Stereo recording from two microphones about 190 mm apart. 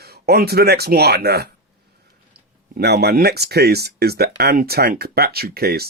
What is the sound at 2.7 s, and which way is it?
Speech, 55° right (ahead or behind).